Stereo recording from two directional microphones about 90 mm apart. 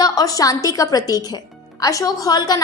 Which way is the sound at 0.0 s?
45° left (ahead or behind).